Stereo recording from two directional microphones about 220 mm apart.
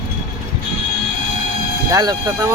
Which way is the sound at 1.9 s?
15° right (ahead or behind).